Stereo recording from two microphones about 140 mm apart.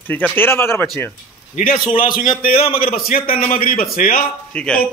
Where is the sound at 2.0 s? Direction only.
80° left.